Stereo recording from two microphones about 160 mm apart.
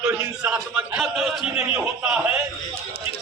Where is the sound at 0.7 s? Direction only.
5° right (ahead or behind).